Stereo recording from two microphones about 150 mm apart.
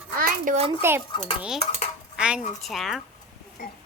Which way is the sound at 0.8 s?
15° right (ahead or behind).